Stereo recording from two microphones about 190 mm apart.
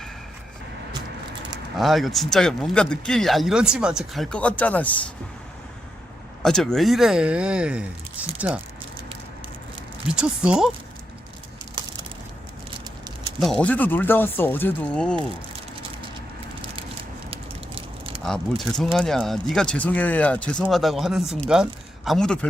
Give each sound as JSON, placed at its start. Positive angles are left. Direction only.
{"t": 1.7, "sound": "speech", "side_deg": 0}
{"t": 6.4, "sound": "speech", "side_deg": 5}
{"t": 10.1, "sound": "speech", "side_deg": -5}
{"t": 13.4, "sound": "speech", "side_deg": 5}
{"t": 17.3, "sound": "a sound", "side_deg": -30}
{"t": 18.2, "sound": "speech", "side_deg": 0}